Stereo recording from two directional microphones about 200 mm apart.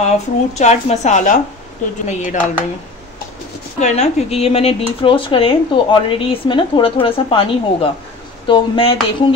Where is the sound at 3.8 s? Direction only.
35° left (ahead or behind).